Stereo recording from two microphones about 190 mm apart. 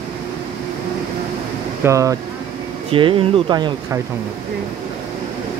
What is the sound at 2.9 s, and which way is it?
Speech, 25° right (ahead or behind).